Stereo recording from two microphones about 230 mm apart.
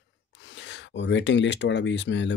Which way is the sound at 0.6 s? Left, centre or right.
Left.